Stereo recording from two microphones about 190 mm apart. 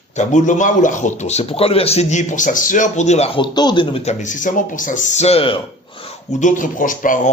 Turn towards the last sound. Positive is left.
turn(degrees=45)  # may be behind; listen again after turning